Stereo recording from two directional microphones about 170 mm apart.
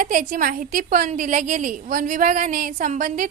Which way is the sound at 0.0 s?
50° right (ahead or behind).